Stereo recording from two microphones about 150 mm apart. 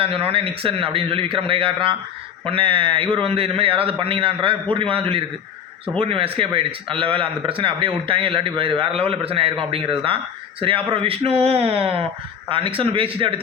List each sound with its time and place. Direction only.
0.0 s a man's voice: 40° right (ahead or behind)